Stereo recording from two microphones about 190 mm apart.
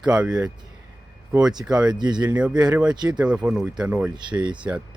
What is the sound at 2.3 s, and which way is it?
Speech, 5° right (ahead or behind).